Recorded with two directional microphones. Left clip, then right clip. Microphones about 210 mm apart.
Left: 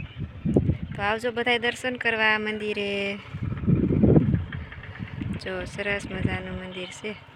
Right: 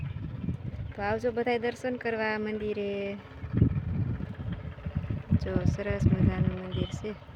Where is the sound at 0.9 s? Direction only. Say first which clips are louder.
Left 3 dB; centre (ahead or behind).